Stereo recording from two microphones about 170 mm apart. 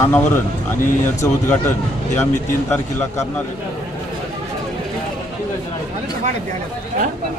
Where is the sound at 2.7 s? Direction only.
15° left (ahead or behind).